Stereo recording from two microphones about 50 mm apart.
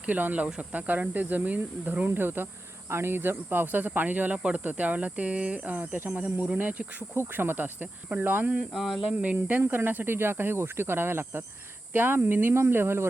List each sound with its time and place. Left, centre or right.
0.0 s cricket: right
2.0 s speech: right
2.9 s cricket: right
4.4 s speech: right
5.6 s cricket: right
7.2 s speech: right
8.7 s speech: centre
9.1 s speech: right